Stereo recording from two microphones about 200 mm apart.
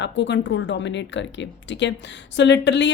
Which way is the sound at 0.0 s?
60° left (ahead or behind).